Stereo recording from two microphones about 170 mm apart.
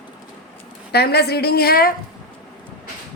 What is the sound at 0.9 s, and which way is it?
A woman's voice, 70° left (ahead or behind).